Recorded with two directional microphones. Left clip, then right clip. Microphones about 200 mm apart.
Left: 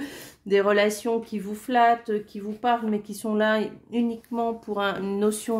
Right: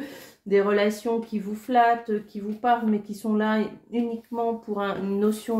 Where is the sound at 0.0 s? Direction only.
40° left (ahead or behind).